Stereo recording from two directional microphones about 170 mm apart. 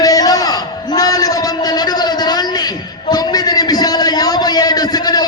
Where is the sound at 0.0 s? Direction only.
20° left (ahead or behind).